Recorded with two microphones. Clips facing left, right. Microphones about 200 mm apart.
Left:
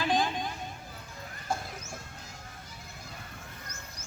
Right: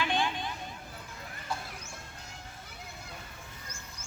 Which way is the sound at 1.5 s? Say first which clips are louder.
Left 4 dB; 45° left (ahead or behind).